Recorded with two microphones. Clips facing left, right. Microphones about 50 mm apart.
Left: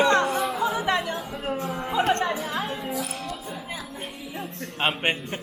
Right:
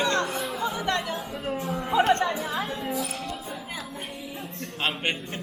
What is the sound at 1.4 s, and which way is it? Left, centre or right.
Speech, left.